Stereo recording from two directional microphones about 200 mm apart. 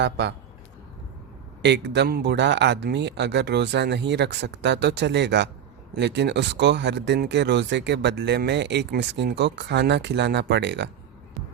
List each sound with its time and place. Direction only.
0.0 s speech: 60° right (ahead or behind)
1.6 s speech: 60° right (ahead or behind)